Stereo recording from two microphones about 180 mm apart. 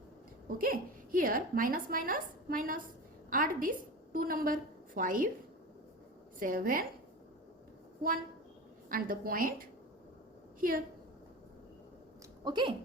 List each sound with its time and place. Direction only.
0.4 s a woman's voice: 50° right (ahead or behind)
6.4 s a woman's voice: 50° right (ahead or behind)
8.9 s a woman's voice: 50° right (ahead or behind)
12.5 s speech: 25° right (ahead or behind)